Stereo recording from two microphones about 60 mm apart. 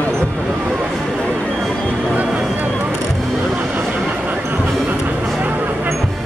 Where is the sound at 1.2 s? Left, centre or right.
Left.